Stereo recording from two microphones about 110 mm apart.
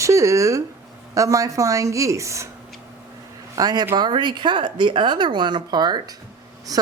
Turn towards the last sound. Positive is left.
turn(degrees=-35)  # may be behind; listen again after turning